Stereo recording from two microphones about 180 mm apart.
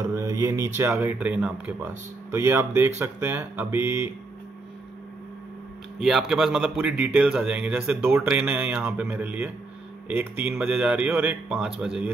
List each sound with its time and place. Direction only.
0.1 s a sound: 15° right (ahead or behind)
0.7 s speech: 15° right (ahead or behind)
5.9 s speech: centre (ahead or behind)